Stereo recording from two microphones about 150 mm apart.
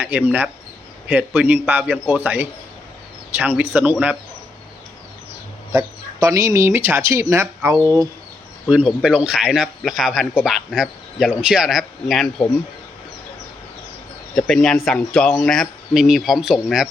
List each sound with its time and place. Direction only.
0.0 s a man's voice: 10° right (ahead or behind)
5.7 s speech: 20° right (ahead or behind)
8.7 s speech: 5° right (ahead or behind)
14.3 s speech: 5° left (ahead or behind)